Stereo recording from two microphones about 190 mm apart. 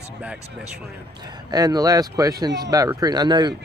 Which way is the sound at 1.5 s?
20° right (ahead or behind).